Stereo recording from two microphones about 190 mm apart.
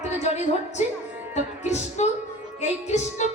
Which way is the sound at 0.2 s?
35° left (ahead or behind).